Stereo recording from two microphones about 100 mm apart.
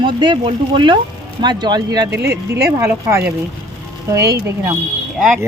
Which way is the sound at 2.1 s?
30° right (ahead or behind).